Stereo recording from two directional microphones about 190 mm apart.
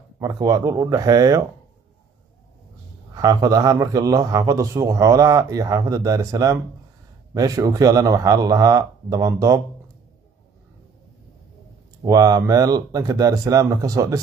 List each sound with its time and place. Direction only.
0.2 s speech: 20° right (ahead or behind)
3.2 s a man's voice: 20° right (ahead or behind)
12.0 s speech: 20° right (ahead or behind)